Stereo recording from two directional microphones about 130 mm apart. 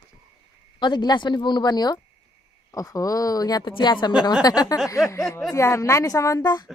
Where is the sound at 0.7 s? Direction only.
35° left (ahead or behind).